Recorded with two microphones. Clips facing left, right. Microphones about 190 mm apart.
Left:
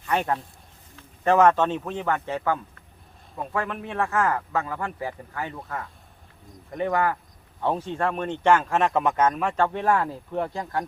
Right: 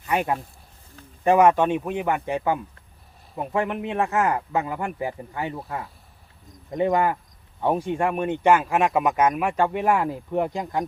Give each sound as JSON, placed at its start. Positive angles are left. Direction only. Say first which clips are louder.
{"t": 0.1, "sound": "speech", "louder": "right 1 dB", "side_deg": -10}